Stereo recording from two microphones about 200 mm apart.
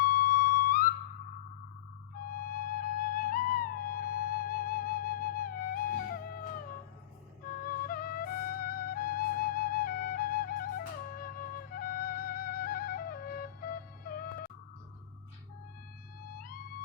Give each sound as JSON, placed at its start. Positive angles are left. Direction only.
{"t": 0.0, "sound": "music", "side_deg": 45}
{"t": 2.2, "sound": "music", "side_deg": 45}
{"t": 7.6, "sound": "music", "side_deg": 45}